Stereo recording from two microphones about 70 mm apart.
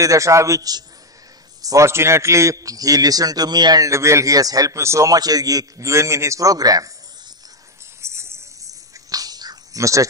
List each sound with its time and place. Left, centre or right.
0.0 s a man's voice: right
1.9 s a man's voice: right
3.8 s a man's voice: right
4.7 s a man's voice: right
6.5 s a man's voice: right
8.0 s a sound: right
9.8 s a man's voice: right